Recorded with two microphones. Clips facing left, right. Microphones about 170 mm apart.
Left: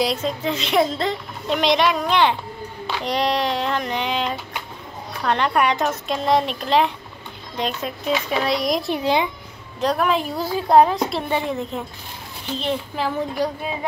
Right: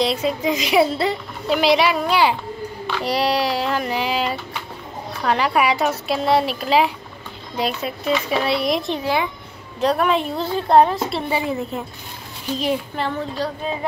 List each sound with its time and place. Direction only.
0.0 s a woman's voice: 5° right (ahead or behind)
8.9 s a child's voice: 20° left (ahead or behind)
9.8 s a woman's voice: centre (ahead or behind)
13.2 s a child's voice: 15° left (ahead or behind)